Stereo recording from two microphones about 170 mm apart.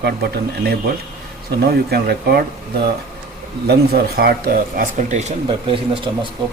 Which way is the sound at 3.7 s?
70° right (ahead or behind).